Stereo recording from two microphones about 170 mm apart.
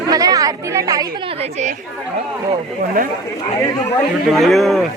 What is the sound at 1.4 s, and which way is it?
Speech, 40° right (ahead or behind).